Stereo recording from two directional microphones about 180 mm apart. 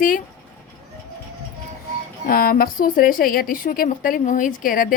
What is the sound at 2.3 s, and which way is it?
A woman's voice, 55° left (ahead or behind).